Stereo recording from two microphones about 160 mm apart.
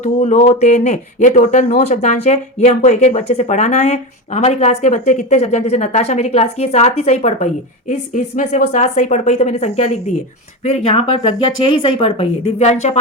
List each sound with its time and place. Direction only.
0.0 s speech: 45° left (ahead or behind)